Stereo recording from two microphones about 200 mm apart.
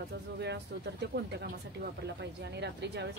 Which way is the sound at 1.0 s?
55° right (ahead or behind).